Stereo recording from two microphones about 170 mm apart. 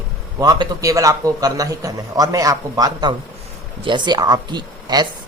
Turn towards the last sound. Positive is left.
turn(degrees=-25)  # may be behind; listen again after turning